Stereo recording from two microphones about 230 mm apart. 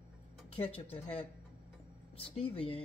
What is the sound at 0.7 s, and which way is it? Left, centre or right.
Speech, left.